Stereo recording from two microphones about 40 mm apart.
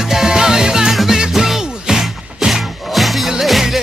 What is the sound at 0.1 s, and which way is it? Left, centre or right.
Music, centre.